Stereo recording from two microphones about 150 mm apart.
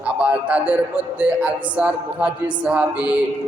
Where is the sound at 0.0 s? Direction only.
10° right (ahead or behind).